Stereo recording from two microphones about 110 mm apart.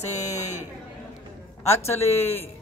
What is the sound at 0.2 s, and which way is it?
Speech, 90° left.